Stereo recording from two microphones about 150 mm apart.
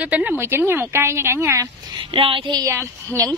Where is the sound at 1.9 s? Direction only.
35° right (ahead or behind).